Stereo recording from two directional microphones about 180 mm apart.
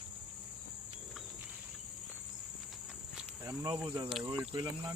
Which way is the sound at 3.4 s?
20° right (ahead or behind).